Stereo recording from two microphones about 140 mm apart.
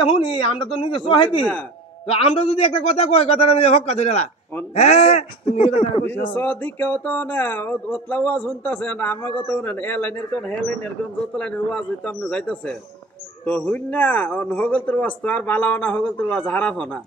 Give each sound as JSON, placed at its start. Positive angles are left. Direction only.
{"t": 0.0, "sound": "speech", "side_deg": 40}
{"t": 1.4, "sound": "a man's voice", "side_deg": 10}
{"t": 2.0, "sound": "a man's voice", "side_deg": 45}
{"t": 6.3, "sound": "a man's voice", "side_deg": 15}